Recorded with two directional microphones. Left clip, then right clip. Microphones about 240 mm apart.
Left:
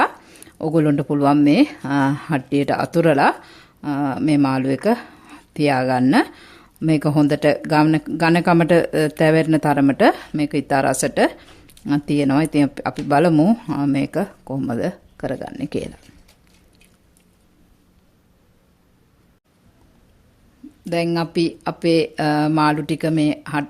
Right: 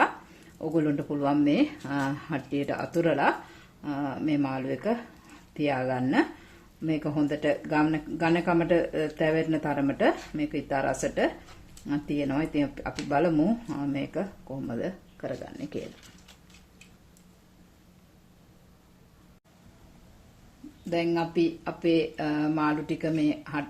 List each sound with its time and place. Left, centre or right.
0.0 s speech: left
20.9 s speech: left